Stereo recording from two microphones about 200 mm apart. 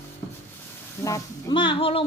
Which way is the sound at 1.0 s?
20° left (ahead or behind).